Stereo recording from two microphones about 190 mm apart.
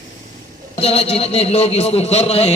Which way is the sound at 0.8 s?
30° left (ahead or behind).